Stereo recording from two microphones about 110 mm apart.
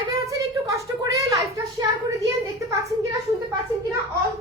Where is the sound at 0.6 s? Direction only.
30° right (ahead or behind).